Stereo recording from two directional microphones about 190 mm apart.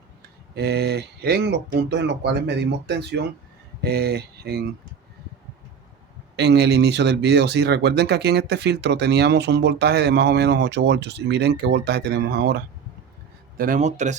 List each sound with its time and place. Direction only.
0.5 s speech: 60° right (ahead or behind)
6.3 s speech: 60° right (ahead or behind)
13.6 s speech: 45° right (ahead or behind)